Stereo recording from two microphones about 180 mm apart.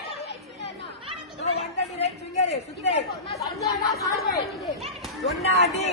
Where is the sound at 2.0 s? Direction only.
35° left (ahead or behind).